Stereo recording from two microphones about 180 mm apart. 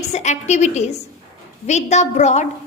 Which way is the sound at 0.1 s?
40° left (ahead or behind).